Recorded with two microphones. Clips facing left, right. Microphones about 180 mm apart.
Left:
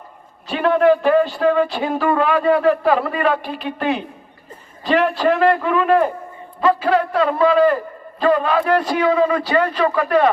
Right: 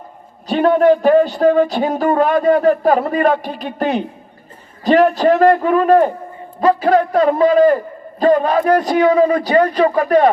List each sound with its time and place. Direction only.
0.4 s speech: 40° right (ahead or behind)